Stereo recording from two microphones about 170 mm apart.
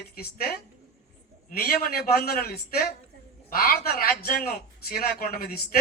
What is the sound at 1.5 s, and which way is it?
A man's voice, 60° left (ahead or behind).